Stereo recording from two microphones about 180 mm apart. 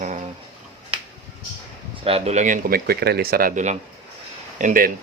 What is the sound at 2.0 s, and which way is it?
Speech, 35° right (ahead or behind).